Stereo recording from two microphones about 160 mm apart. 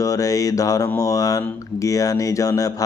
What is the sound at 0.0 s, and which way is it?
Mantra, 20° left (ahead or behind).